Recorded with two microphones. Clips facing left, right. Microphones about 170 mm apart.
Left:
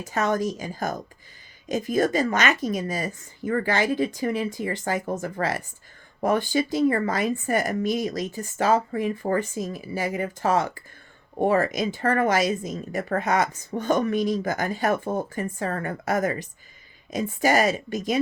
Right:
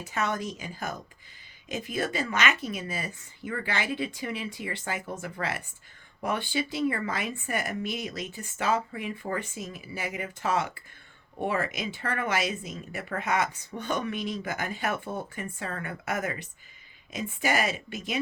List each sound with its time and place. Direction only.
0.0 s speech: 40° left (ahead or behind)